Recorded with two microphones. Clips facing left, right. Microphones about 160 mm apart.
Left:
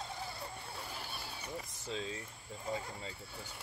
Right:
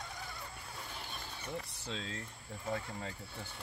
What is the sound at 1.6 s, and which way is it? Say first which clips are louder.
Speech: left 2 dB; 70° right (ahead or behind).